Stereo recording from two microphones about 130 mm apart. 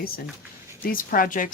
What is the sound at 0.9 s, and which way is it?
Speech, 90° left.